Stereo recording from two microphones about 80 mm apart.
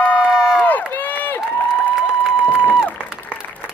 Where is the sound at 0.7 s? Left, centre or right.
Left.